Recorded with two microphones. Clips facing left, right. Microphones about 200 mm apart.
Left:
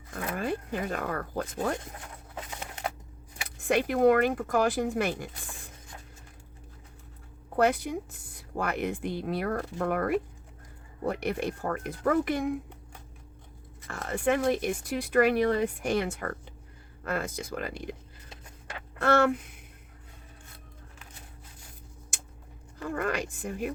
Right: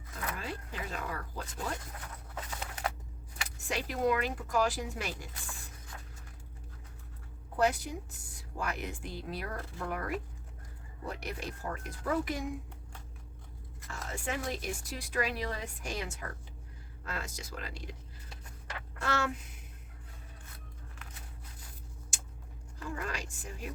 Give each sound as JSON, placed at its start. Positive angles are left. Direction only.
{"t": 0.3, "sound": "a woman's voice", "side_deg": 55}
{"t": 2.5, "sound": "a sound", "side_deg": 25}
{"t": 3.6, "sound": "a woman's voice", "side_deg": 55}
{"t": 7.5, "sound": "a woman's voice", "side_deg": 55}
{"t": 13.8, "sound": "a woman's voice", "side_deg": 55}
{"t": 18.9, "sound": "a sound", "side_deg": 55}
{"t": 22.8, "sound": "a woman's voice", "side_deg": 60}